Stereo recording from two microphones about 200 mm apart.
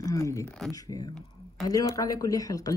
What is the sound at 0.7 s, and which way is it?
Speech, 20° left (ahead or behind).